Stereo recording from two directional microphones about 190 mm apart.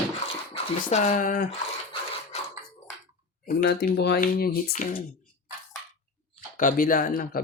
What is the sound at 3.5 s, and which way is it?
Speech, 50° left (ahead or behind).